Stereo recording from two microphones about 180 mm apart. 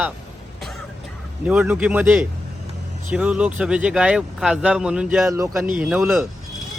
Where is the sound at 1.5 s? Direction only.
10° right (ahead or behind).